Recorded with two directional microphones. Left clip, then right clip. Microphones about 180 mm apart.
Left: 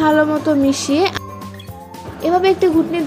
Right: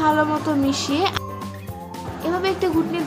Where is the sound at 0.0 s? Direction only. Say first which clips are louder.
Left 4 dB; 25° left (ahead or behind).